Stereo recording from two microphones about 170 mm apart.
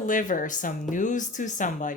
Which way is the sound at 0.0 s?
50° left (ahead or behind).